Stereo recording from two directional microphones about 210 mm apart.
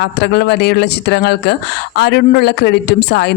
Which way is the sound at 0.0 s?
50° left (ahead or behind).